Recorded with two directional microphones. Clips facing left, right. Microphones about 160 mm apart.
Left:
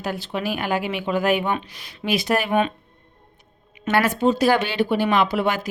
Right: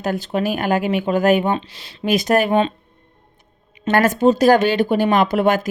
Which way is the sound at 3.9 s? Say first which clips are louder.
Right 4 dB; 45° right (ahead or behind).